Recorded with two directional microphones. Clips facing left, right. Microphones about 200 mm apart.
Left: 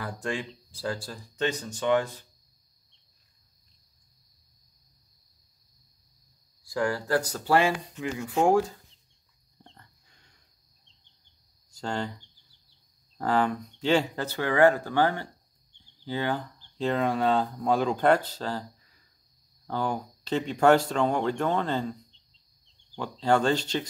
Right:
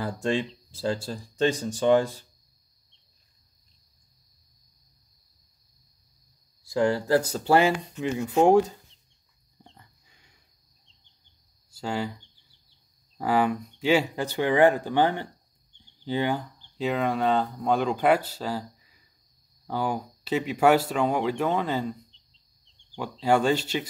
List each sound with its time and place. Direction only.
0.0 s speech: 25° right (ahead or behind)
6.6 s speech: 25° right (ahead or behind)
9.6 s pig: 10° right (ahead or behind)
11.7 s speech: 5° right (ahead or behind)
13.2 s speech: 10° right (ahead or behind)
23.2 s speech: 10° right (ahead or behind)